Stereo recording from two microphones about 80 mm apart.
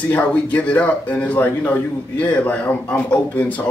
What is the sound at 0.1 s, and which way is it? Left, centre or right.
Speech, left.